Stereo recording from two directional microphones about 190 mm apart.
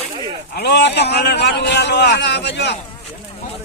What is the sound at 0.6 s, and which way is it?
A man's voice, 60° left (ahead or behind).